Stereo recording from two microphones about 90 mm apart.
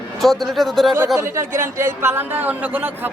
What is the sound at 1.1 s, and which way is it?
Speech, 30° right (ahead or behind).